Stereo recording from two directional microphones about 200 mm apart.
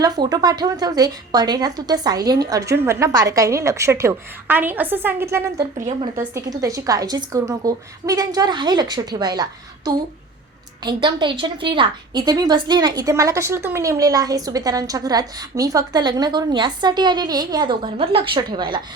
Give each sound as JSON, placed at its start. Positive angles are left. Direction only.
{"t": 0.0, "sound": "a woman's voice", "side_deg": -20}
{"t": 6.1, "sound": "a woman's voice", "side_deg": -15}